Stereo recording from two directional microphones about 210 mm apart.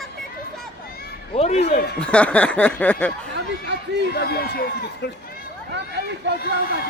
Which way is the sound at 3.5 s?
55° right (ahead or behind).